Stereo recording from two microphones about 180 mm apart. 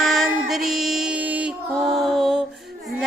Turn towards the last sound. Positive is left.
turn(degrees=0)  # may be behind; listen again after turning